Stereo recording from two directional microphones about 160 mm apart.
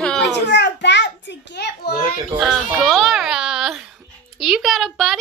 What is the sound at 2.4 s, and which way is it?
A child's voice, centre (ahead or behind).